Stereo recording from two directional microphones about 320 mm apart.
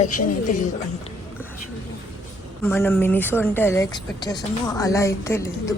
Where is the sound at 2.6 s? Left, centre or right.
Centre.